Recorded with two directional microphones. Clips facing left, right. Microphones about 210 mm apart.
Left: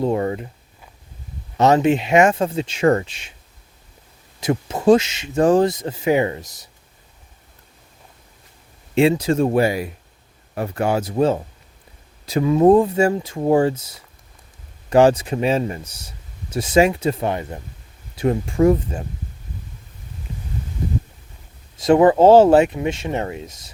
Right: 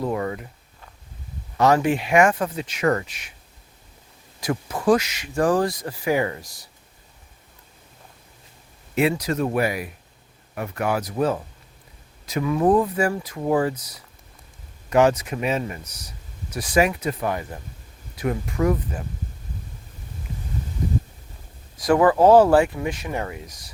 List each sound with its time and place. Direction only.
0.0 s speech: 30° left (ahead or behind)
1.5 s speech: 25° left (ahead or behind)
4.4 s speech: 25° left (ahead or behind)
9.0 s speech: 25° left (ahead or behind)
21.8 s speech: 25° left (ahead or behind)